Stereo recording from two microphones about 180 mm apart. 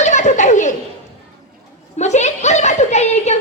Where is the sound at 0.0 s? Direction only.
40° left (ahead or behind).